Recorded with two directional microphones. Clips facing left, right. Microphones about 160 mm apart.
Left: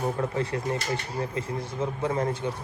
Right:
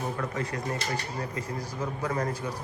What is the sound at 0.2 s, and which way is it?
A man's voice, 30° left (ahead or behind).